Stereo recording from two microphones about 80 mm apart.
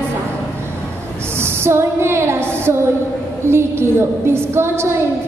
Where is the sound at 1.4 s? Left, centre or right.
Right.